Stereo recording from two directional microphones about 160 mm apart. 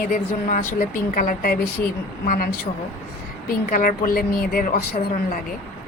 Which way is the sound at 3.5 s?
65° left (ahead or behind).